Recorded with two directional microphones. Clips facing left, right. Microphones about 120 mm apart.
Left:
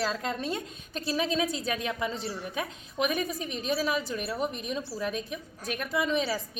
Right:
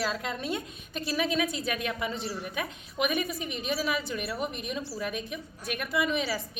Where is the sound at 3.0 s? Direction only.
40° left (ahead or behind).